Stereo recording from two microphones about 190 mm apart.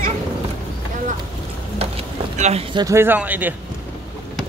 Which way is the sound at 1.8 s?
30° right (ahead or behind).